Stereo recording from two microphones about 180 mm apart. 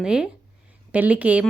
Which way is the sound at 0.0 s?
5° right (ahead or behind).